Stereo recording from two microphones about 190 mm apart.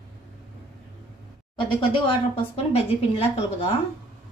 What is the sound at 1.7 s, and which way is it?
A woman's voice, 25° left (ahead or behind).